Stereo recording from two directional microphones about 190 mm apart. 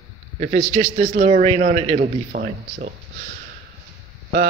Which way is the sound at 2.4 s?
45° right (ahead or behind).